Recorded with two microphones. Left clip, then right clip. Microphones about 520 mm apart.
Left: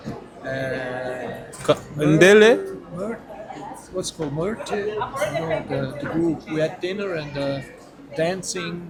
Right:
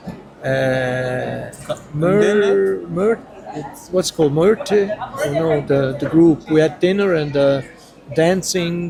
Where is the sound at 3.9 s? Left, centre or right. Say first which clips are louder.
Right 12 dB; right.